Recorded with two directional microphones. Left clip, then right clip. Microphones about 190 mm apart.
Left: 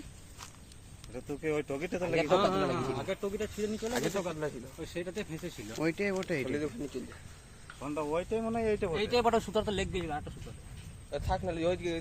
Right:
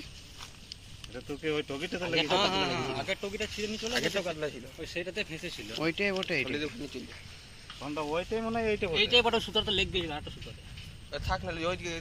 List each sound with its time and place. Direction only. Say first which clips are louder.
1.1 s speech: right 1 dB; 15° left (ahead or behind)
2.2 s speech: left 1 dB; 50° left (ahead or behind)
5.8 s speech: right 2 dB; 10° left (ahead or behind)
6.5 s speech: even; 40° left (ahead or behind)
7.8 s speech: even; 10° left (ahead or behind)
9.0 s speech: right 1 dB; 40° left (ahead or behind); by 11.9 s 55° left (ahead or behind)